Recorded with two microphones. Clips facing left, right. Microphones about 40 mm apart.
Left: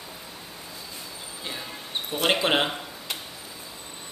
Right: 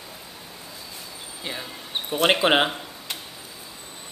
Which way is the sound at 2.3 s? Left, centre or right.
Centre.